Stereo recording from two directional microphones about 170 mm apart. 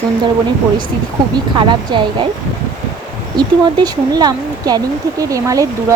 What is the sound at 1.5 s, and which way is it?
Speech, 30° right (ahead or behind).